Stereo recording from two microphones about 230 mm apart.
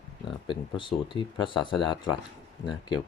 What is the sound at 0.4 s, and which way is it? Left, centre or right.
Speech, left.